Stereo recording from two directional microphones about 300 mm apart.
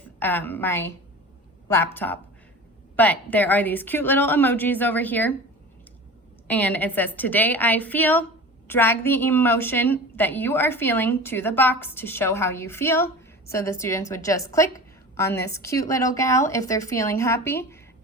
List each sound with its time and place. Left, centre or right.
0.2 s a woman's voice: centre
6.5 s a woman's voice: centre